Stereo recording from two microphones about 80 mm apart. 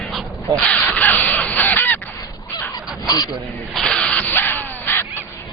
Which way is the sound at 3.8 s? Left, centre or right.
Centre.